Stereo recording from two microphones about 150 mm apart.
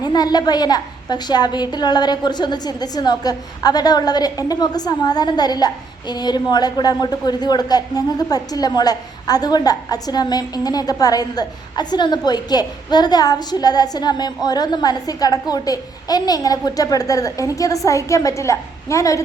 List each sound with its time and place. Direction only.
0.0 s a woman's voice: 25° left (ahead or behind)